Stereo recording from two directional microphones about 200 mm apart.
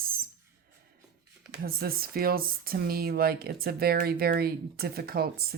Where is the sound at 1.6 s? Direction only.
50° right (ahead or behind).